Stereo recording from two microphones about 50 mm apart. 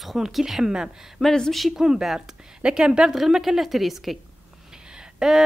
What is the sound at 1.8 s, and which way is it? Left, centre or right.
Speech, centre.